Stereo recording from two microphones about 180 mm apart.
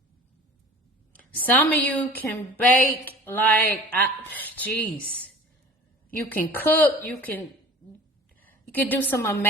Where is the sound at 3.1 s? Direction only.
10° left (ahead or behind).